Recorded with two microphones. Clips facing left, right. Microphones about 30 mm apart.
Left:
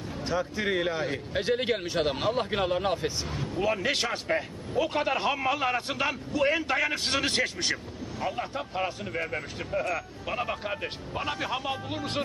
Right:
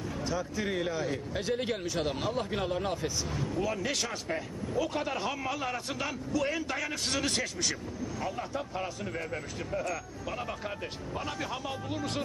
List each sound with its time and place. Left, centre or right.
0.2 s speech: left